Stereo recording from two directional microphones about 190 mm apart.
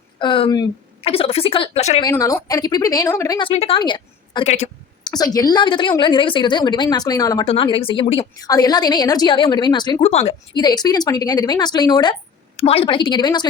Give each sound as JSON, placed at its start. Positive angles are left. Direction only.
{"t": 0.2, "sound": "a woman's voice", "side_deg": 25}
{"t": 2.0, "sound": "a woman's voice", "side_deg": 15}
{"t": 5.0, "sound": "a woman's voice", "side_deg": 20}